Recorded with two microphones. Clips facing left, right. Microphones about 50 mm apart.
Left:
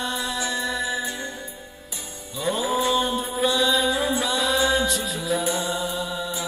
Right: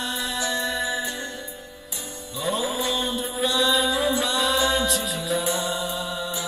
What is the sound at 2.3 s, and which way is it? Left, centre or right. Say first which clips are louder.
Music: left 2 dB; centre.